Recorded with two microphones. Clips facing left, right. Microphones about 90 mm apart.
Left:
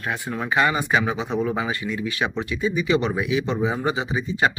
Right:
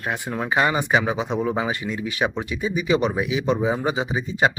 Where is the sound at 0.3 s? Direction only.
20° right (ahead or behind).